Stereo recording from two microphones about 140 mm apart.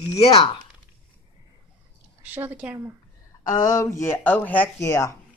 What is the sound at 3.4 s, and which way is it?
Speech, 25° left (ahead or behind).